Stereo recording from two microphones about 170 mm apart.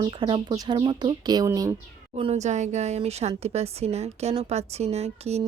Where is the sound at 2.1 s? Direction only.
35° right (ahead or behind).